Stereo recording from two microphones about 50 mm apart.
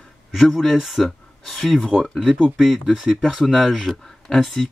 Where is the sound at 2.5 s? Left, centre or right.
Centre.